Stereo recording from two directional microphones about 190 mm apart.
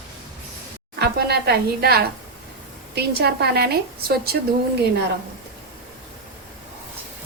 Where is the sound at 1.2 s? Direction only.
55° right (ahead or behind).